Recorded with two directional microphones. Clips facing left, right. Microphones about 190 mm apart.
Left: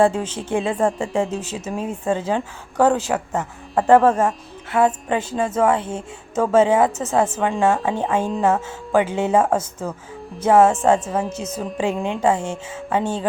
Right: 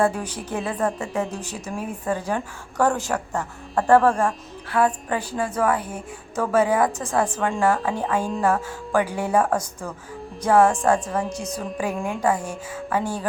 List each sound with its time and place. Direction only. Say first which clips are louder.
0.0 s speech: left 4 dB; 25° left (ahead or behind)